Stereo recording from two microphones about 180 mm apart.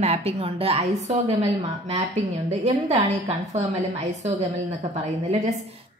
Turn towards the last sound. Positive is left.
turn(degrees=-40)  # may be behind; listen again after turning